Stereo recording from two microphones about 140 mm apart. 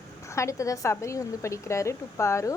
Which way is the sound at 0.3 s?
20° left (ahead or behind).